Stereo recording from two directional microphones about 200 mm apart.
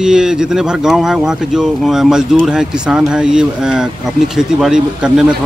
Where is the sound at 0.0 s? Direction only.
5° right (ahead or behind).